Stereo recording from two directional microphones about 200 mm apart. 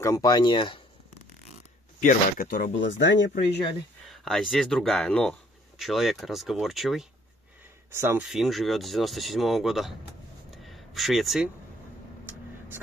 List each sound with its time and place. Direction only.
0.0 s speech: 20° left (ahead or behind)
2.0 s speech: 45° left (ahead or behind); by 3.5 s 60° left (ahead or behind)
4.0 s speech: centre (ahead or behind)
7.9 s speech: 10° right (ahead or behind)
10.5 s a sound: centre (ahead or behind)